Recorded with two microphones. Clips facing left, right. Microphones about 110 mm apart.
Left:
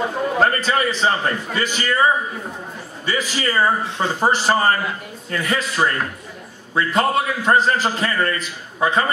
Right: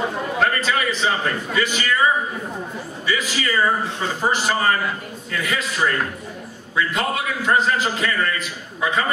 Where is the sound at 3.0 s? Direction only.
40° left (ahead or behind).